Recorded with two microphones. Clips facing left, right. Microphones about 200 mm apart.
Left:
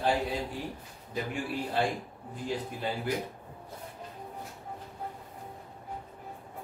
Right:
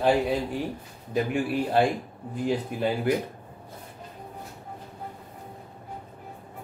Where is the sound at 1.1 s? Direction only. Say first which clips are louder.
Right 8 dB; 65° right (ahead or behind).